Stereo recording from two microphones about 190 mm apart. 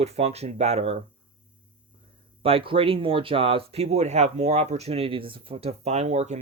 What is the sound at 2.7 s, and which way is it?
Speech, 30° right (ahead or behind).